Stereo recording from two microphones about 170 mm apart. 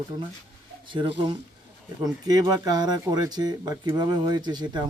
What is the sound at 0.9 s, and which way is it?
Speech, 30° right (ahead or behind).